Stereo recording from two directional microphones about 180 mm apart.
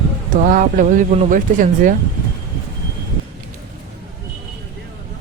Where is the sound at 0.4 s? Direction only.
50° right (ahead or behind).